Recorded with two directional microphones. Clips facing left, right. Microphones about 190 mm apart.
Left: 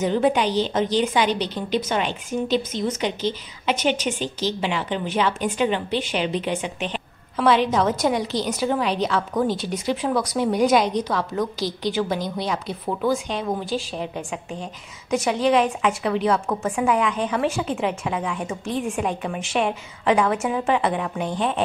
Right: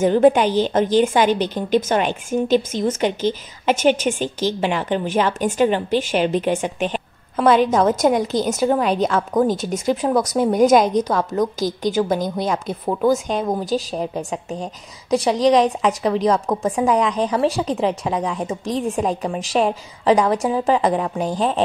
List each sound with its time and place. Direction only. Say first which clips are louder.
0.0 s a woman's voice: right 6 dB; 50° right (ahead or behind)